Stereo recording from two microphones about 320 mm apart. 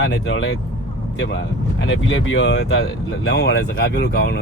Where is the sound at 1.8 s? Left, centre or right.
Left.